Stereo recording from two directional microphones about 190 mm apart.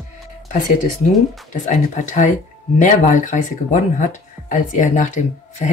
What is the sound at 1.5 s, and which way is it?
Speech, 40° left (ahead or behind).